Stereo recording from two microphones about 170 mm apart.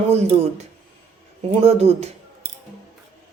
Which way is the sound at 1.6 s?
35° right (ahead or behind).